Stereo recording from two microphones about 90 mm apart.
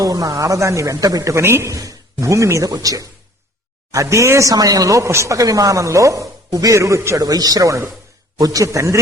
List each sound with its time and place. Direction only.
0.0 s speech: 45° right (ahead or behind)
7.2 s speech: 45° right (ahead or behind)